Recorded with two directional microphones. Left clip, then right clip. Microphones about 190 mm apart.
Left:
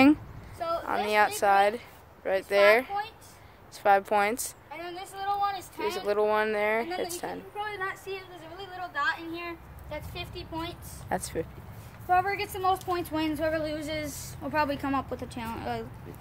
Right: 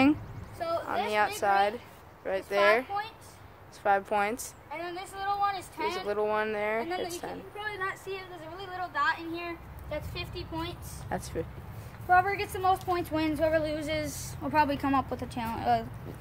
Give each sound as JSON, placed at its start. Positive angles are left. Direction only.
{"t": 0.6, "sound": "a sound", "side_deg": 10}
{"t": 0.8, "sound": "speech", "side_deg": 40}
{"t": 4.6, "sound": "a woman's voice", "side_deg": 10}
{"t": 5.9, "sound": "speech", "side_deg": 40}
{"t": 7.5, "sound": "a woman's voice", "side_deg": 10}
{"t": 11.1, "sound": "speech", "side_deg": 35}
{"t": 12.1, "sound": "a woman's voice", "side_deg": 5}